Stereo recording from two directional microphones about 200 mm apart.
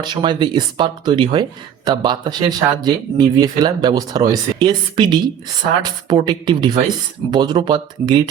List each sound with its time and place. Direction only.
0.0 s speech: 20° right (ahead or behind)